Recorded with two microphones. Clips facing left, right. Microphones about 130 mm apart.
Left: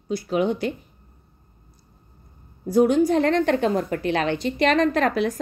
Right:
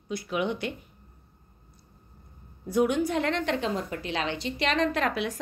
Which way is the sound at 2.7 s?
35° left (ahead or behind).